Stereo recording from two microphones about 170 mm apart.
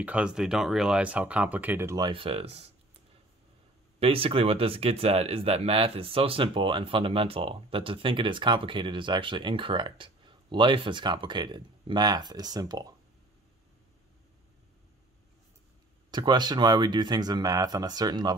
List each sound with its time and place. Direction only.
0.0 s speech: 5° right (ahead or behind)
2.0 s speech: 35° right (ahead or behind)
4.0 s speech: 35° right (ahead or behind)
16.1 s speech: 25° right (ahead or behind)